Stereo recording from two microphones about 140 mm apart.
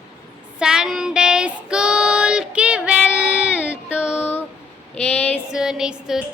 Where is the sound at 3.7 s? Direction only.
10° right (ahead or behind).